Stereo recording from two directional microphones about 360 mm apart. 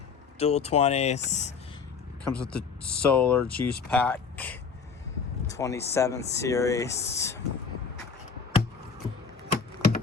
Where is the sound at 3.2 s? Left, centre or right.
Centre.